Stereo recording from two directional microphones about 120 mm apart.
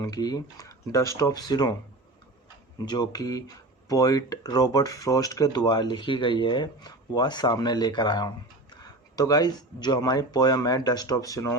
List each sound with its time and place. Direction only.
0.0 s speech: 35° left (ahead or behind)
2.7 s speech: 35° left (ahead or behind)